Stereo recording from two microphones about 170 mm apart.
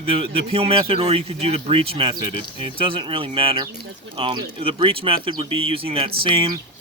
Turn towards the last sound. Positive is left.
turn(degrees=-30)  # may be behind; listen again after turning